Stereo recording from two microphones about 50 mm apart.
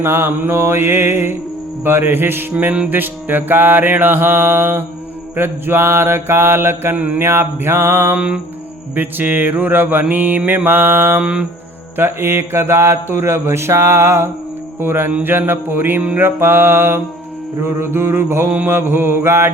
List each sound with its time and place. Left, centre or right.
0.0 s mantra: right
6.9 s mantra: right
7.2 s mantra: right
8.1 s mantra: right
9.0 s mantra: right
11.2 s mantra: right
11.9 s mantra: right
14.8 s mantra: right